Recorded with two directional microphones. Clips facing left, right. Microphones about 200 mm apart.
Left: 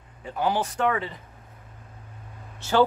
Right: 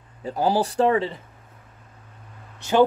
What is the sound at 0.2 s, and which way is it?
Speech, 35° right (ahead or behind).